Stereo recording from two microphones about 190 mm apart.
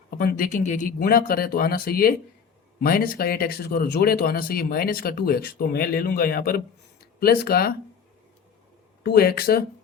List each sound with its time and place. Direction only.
0.2 s speech: 50° left (ahead or behind)
9.0 s speech: 55° left (ahead or behind)